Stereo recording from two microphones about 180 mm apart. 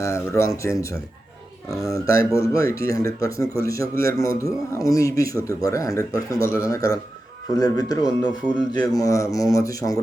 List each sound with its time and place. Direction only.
0.0 s speech: 15° left (ahead or behind)